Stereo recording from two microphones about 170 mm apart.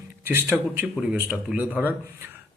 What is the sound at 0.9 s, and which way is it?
Speech, 5° right (ahead or behind).